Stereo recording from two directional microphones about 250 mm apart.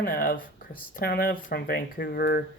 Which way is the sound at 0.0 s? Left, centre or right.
Left.